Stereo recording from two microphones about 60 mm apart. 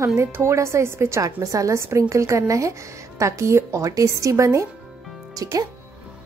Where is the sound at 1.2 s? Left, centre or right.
Right.